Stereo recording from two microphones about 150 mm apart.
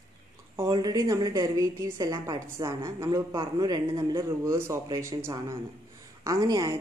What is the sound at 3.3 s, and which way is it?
A woman's voice, 30° right (ahead or behind).